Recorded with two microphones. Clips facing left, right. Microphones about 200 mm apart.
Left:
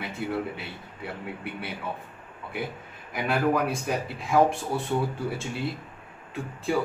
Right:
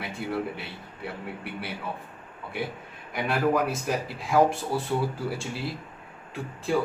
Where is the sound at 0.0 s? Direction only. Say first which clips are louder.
Even; centre (ahead or behind).